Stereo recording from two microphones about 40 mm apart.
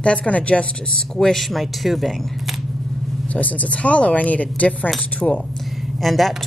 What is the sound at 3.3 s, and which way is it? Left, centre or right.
Speech, left.